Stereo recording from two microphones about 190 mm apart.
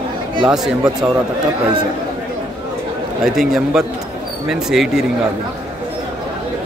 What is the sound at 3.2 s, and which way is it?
Speech, centre (ahead or behind).